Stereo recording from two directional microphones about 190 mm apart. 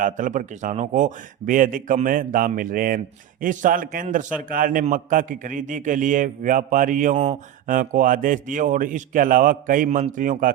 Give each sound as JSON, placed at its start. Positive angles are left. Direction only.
{"t": 0.0, "sound": "a man's voice", "side_deg": -45}